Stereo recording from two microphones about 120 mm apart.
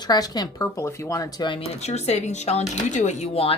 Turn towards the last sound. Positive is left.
turn(degrees=85)